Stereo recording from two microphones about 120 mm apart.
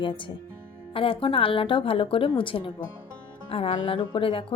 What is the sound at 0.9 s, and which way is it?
A woman's voice, 50° left (ahead or behind).